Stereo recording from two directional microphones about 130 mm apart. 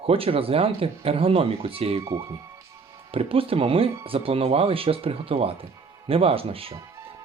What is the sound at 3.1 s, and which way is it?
Speech, 45° right (ahead or behind).